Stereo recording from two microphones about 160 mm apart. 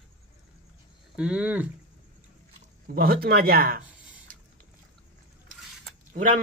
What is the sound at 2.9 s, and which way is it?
Speech, 70° right (ahead or behind).